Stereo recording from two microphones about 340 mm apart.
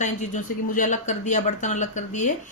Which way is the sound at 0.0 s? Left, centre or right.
Left.